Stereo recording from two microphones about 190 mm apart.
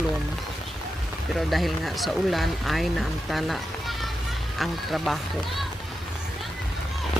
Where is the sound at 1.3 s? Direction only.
Centre (ahead or behind).